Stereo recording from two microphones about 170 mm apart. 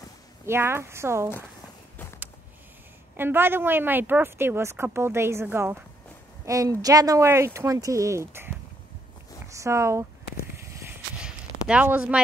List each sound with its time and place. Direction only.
0.5 s speech: 15° right (ahead or behind)
3.2 s speech: 15° right (ahead or behind)
11.1 s a sound: 5° right (ahead or behind)